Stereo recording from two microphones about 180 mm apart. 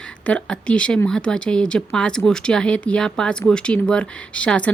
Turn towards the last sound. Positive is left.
turn(degrees=5)  # may be behind; listen again after turning